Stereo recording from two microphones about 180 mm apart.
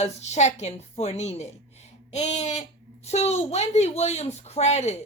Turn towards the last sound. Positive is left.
turn(degrees=35)  # may be behind; listen again after turning